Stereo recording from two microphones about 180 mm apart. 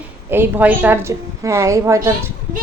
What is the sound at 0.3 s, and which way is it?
A woman's voice, 10° right (ahead or behind).